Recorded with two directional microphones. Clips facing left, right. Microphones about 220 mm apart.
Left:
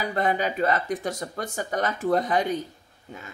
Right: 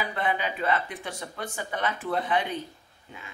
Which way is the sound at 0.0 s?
40° left (ahead or behind).